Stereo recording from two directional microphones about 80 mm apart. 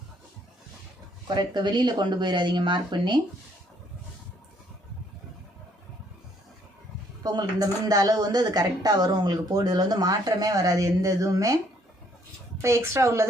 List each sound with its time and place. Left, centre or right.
1.3 s speech: right
7.2 s speech: right
12.6 s speech: right